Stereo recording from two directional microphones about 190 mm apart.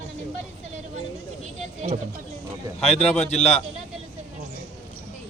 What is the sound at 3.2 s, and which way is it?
Speech, 35° left (ahead or behind).